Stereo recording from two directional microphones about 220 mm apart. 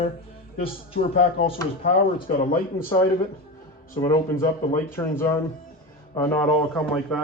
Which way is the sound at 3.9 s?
10° left (ahead or behind).